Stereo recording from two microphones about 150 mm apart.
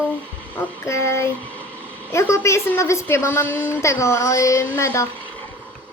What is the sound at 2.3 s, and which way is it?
A woman's voice, 20° left (ahead or behind).